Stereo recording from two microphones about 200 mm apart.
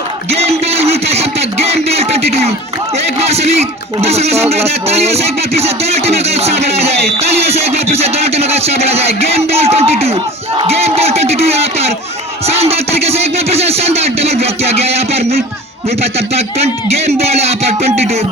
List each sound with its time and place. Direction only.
0.3 s music: 30° right (ahead or behind)
3.2 s speech: 30° right (ahead or behind)
7.9 s music: 30° right (ahead or behind)
10.6 s a sound: 30° right (ahead or behind)
16.1 s speech: 30° right (ahead or behind)
17.1 s music: 30° right (ahead or behind)